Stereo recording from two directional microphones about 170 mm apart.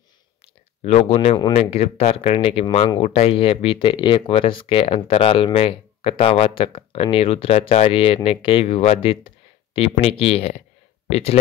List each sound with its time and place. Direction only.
0.8 s speech: 40° left (ahead or behind)